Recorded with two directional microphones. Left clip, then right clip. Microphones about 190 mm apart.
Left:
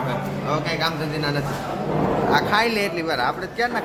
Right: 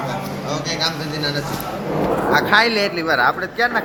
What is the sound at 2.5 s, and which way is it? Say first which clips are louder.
Speech: right 5 dB; 5° right (ahead or behind).